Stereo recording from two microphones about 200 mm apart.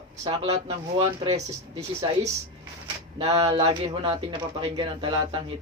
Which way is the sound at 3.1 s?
20° right (ahead or behind).